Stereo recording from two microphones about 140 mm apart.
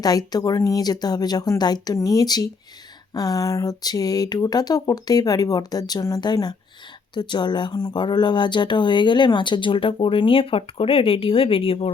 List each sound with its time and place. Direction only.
0.0 s speech: 30° left (ahead or behind)